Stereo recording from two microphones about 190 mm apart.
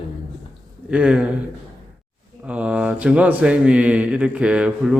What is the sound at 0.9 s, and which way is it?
Speech, 5° right (ahead or behind).